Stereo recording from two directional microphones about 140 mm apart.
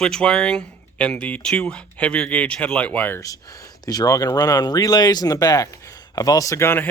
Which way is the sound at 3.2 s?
25° left (ahead or behind).